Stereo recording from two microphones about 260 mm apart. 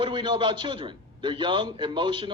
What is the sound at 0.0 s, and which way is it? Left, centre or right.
A man's voice, centre.